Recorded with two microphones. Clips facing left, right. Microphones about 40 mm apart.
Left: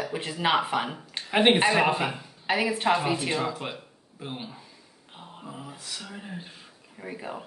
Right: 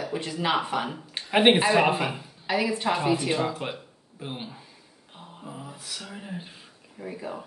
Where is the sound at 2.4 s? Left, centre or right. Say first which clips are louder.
Left 1 dB; left.